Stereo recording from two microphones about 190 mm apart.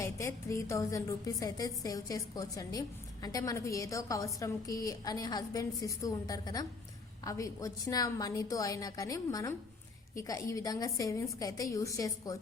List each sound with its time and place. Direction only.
0.0 s a woman's voice: 15° left (ahead or behind)